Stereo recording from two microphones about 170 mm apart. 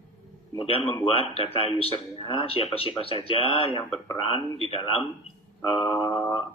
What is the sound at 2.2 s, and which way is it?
Speech, 30° left (ahead or behind).